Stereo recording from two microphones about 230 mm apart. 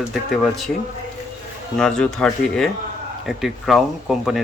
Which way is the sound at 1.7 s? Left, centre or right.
Centre.